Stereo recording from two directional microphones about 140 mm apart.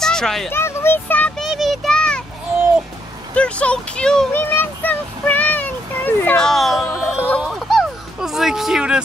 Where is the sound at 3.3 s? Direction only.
10° left (ahead or behind).